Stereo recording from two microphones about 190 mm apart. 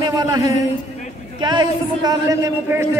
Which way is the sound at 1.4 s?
25° right (ahead or behind).